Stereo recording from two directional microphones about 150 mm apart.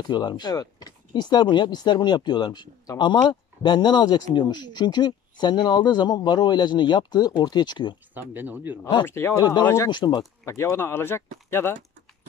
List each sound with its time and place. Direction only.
0.0 s speech: 30° left (ahead or behind)
8.1 s speech: 15° right (ahead or behind)
9.0 s speech: 15° left (ahead or behind)